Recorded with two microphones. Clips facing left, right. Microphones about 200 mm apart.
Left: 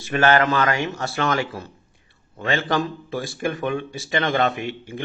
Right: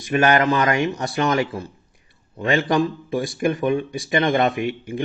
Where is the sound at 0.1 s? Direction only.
15° right (ahead or behind).